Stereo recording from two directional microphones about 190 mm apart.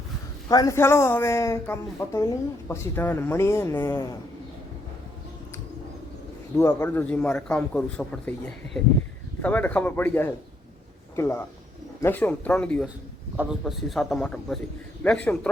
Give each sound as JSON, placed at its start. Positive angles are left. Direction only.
{"t": 0.4, "sound": "a man's voice", "side_deg": 20}
{"t": 6.6, "sound": "a man's voice", "side_deg": 15}
{"t": 13.3, "sound": "a man's voice", "side_deg": -5}